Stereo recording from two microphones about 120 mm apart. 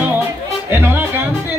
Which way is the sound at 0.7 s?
20° right (ahead or behind).